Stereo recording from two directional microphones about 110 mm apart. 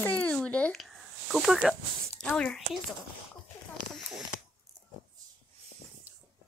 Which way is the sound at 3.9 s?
5° right (ahead or behind).